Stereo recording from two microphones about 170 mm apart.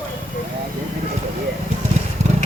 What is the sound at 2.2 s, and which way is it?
Vehicle, 40° right (ahead or behind).